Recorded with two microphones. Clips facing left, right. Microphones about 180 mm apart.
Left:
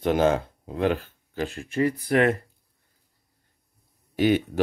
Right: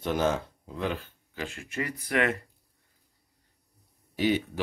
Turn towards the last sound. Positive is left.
turn(degrees=55)  # may be behind; listen again after turning